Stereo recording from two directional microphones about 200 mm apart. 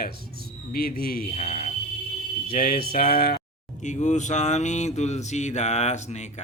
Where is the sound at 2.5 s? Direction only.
50° left (ahead or behind).